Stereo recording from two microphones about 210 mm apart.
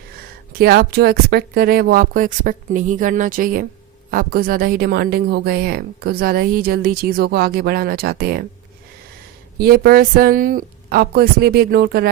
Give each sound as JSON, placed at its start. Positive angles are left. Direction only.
{"t": 0.5, "sound": "speech", "side_deg": -45}
{"t": 9.6, "sound": "speech", "side_deg": -45}